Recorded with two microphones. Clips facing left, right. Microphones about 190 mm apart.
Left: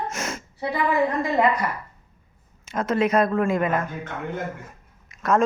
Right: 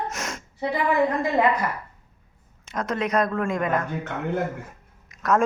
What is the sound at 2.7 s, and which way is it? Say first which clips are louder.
A woman's voice: left 3 dB; 5° left (ahead or behind).